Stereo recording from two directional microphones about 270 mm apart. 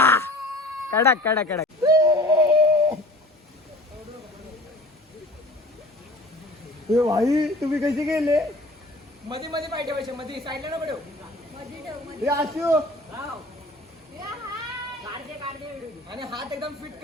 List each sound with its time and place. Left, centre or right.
0.0 s cat: centre
0.9 s speech: centre
1.8 s a sound: centre
6.9 s a man's voice: centre
12.2 s speech: centre
16.0 s speech: centre